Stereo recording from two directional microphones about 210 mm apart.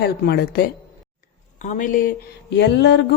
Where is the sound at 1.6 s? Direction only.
35° left (ahead or behind).